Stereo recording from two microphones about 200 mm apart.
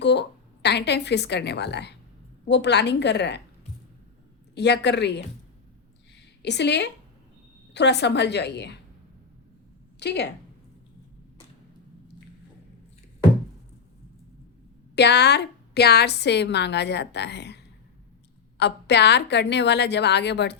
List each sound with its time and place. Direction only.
0.0 s a woman's voice: 60° left (ahead or behind)
4.5 s a woman's voice: 60° left (ahead or behind)
6.4 s a woman's voice: 60° left (ahead or behind)
10.0 s a woman's voice: 55° left (ahead or behind)
14.9 s a woman's voice: 55° left (ahead or behind)